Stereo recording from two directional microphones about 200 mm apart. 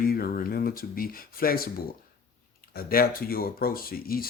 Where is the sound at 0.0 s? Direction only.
45° left (ahead or behind).